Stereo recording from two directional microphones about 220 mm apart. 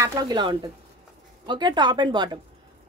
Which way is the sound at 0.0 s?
15° right (ahead or behind).